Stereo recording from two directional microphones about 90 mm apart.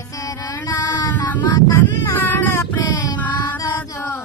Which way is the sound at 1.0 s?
50° left (ahead or behind).